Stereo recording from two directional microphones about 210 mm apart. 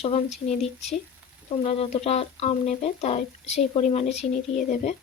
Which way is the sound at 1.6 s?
30° left (ahead or behind).